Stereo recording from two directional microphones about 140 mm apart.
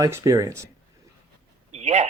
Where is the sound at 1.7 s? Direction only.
50° right (ahead or behind).